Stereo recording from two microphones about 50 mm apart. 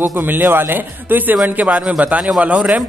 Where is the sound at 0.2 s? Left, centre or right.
Right.